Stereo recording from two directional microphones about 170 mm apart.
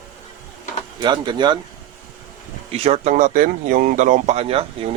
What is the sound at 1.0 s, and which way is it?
Speech, 25° right (ahead or behind).